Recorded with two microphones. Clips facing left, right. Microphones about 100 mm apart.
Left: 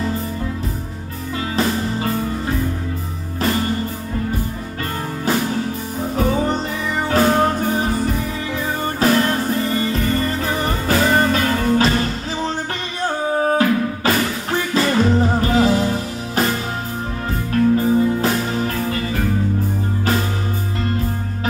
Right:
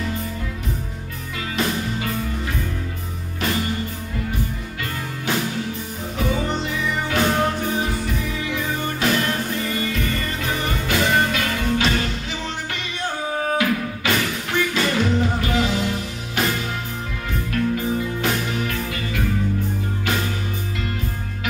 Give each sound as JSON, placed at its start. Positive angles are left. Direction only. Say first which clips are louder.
{"t": 1.6, "sound": "music", "louder": "left 3 dB", "side_deg": 35}
{"t": 3.3, "sound": "music", "louder": "left 4 dB", "side_deg": 35}
{"t": 6.1, "sound": "music", "louder": "left 4 dB", "side_deg": 40}